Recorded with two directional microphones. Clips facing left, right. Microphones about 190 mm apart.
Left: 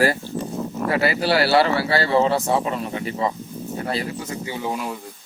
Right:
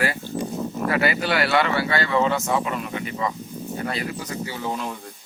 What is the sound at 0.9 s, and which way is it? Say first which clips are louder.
Speech: left 3 dB; 30° left (ahead or behind).